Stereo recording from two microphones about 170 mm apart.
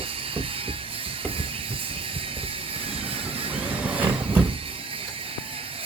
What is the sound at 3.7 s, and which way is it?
Vehicle, 10° right (ahead or behind).